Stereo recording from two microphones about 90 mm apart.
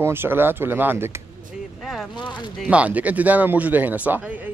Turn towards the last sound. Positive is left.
turn(degrees=-20)  # may be behind; listen again after turning